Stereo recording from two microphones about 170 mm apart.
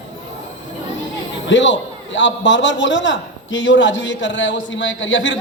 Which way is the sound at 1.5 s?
90° left.